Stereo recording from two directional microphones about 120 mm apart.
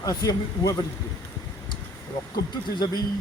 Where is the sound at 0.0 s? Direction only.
30° left (ahead or behind).